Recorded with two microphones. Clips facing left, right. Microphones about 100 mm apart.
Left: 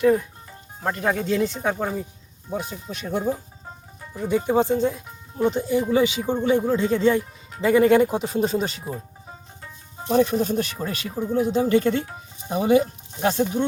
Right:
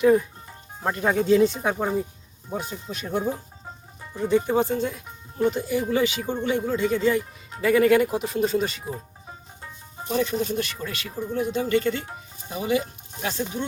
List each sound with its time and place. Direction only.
0.0 s speech: centre (ahead or behind)
2.5 s speech: centre (ahead or behind)
4.1 s speech: 5° left (ahead or behind)
4.4 s speech: 20° left (ahead or behind)
10.1 s speech: 40° left (ahead or behind)
11.3 s speech: 20° left (ahead or behind)
12.5 s speech: 40° left (ahead or behind)